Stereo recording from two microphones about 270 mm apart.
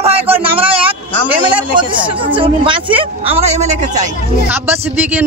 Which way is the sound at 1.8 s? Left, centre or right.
Centre.